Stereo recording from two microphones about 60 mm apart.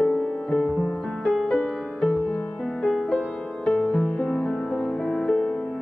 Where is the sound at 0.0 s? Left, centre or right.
Centre.